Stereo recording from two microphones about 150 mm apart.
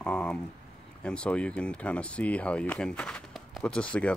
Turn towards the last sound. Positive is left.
turn(degrees=5)  # may be behind; listen again after turning